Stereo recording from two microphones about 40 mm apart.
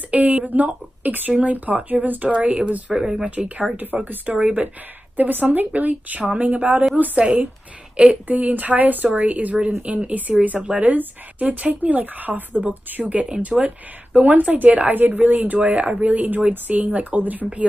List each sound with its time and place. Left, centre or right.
0.1 s speech: right
2.9 s speech: centre
3.3 s speech: right
7.2 s a woman's voice: right
8.3 s speech: right